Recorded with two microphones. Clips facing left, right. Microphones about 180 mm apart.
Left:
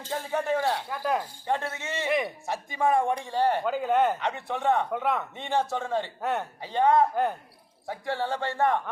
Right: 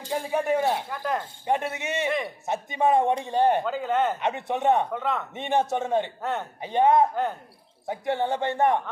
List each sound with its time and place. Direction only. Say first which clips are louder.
0.0 s speech: right 3 dB; 15° right (ahead or behind)
0.9 s speech: left 1 dB; 5° left (ahead or behind)
1.5 s speech: right 5 dB; 20° right (ahead or behind)
3.6 s speech: left 1 dB; 5° left (ahead or behind)
4.2 s speech: right 4 dB; 20° right (ahead or behind)
4.9 s speech: left 1 dB; 10° left (ahead or behind)
5.3 s speech: right 3 dB; 20° right (ahead or behind)